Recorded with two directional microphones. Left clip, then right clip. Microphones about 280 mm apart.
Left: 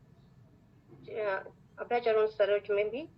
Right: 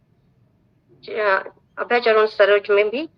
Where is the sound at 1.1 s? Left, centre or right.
Right.